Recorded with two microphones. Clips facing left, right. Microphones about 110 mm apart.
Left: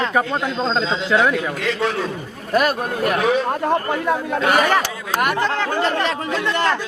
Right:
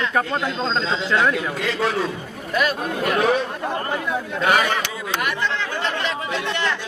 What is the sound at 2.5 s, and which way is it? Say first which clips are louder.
Speech: left 4 dB; 45° left (ahead or behind).